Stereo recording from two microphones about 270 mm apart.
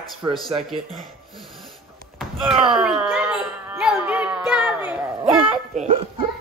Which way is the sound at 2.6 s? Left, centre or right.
Centre.